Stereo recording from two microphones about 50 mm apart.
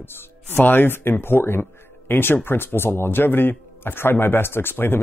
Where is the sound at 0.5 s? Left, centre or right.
Left.